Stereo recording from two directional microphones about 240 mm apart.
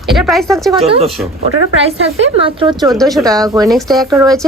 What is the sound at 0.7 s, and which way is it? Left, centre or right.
Speech, right.